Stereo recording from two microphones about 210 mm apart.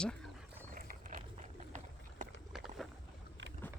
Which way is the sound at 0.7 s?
40° right (ahead or behind).